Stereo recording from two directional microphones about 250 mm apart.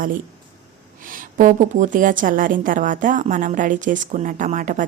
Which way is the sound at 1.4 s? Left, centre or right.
Right.